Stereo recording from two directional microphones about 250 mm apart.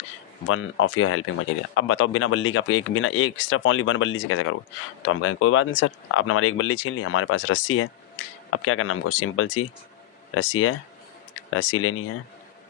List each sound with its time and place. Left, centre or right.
0.4 s speech: left